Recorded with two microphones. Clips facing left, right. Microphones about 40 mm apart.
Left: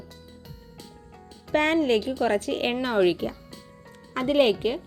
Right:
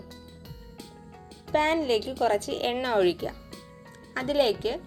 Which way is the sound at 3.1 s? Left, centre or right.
Left.